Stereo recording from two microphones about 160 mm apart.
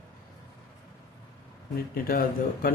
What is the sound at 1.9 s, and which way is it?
Speech, 65° left (ahead or behind).